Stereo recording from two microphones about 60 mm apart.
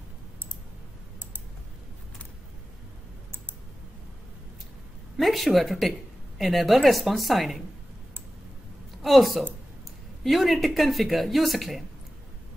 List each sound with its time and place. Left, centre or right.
5.1 s speech: centre
9.0 s speech: centre